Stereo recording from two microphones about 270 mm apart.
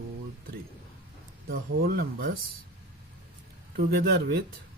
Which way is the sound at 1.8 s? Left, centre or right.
Right.